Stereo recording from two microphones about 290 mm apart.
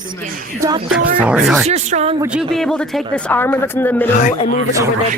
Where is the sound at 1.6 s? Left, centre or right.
Right.